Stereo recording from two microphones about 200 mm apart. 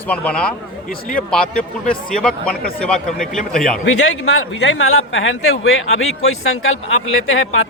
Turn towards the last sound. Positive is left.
turn(degrees=90)